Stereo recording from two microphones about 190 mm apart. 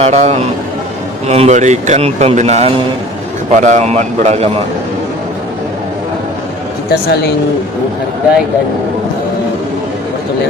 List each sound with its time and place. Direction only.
0.0 s a man's voice: 35° right (ahead or behind)
6.9 s speech: 60° left (ahead or behind)